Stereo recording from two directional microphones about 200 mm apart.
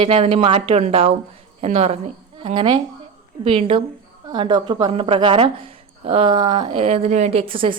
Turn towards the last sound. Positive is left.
turn(degrees=-25)  # may be behind; listen again after turning